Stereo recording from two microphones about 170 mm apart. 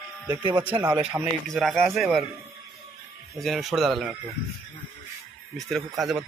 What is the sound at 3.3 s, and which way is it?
Speech, centre (ahead or behind).